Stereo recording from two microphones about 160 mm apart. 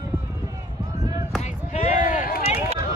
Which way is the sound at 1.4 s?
50° left (ahead or behind).